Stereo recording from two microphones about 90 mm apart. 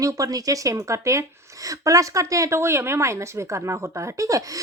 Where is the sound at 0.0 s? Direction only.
40° right (ahead or behind).